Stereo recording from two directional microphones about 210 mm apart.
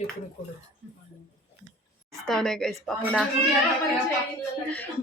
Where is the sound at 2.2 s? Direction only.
Centre (ahead or behind).